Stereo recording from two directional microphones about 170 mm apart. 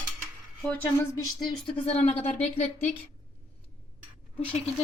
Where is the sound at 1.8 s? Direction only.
40° left (ahead or behind).